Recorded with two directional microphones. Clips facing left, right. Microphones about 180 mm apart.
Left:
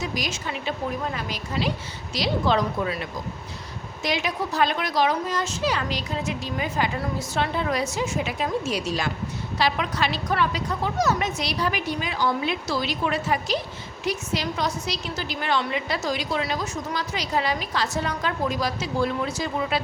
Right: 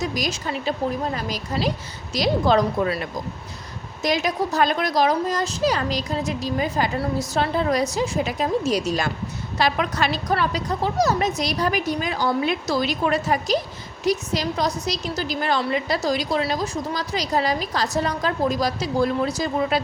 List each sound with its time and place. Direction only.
0.0 s a woman's voice: 40° right (ahead or behind)